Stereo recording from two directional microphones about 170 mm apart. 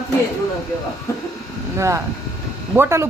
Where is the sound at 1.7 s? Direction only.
15° right (ahead or behind).